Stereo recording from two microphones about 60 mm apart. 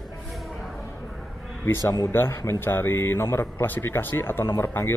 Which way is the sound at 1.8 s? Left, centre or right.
Left.